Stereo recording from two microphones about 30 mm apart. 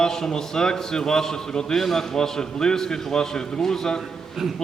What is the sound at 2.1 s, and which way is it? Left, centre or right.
A man's voice, left.